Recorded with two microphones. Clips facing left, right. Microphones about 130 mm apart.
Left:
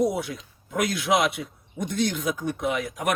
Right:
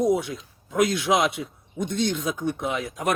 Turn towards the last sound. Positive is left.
turn(degrees=-25)  # may be behind; listen again after turning